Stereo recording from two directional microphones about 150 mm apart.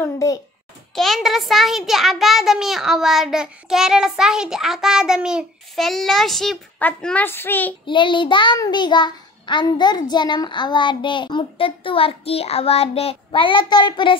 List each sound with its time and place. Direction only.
0.0 s a child's voice: 20° left (ahead or behind)
0.9 s a child's voice: centre (ahead or behind)
7.8 s a child's voice: 30° left (ahead or behind)